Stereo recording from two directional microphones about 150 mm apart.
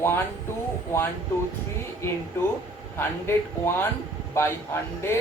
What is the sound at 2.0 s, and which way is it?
Speech, 15° left (ahead or behind).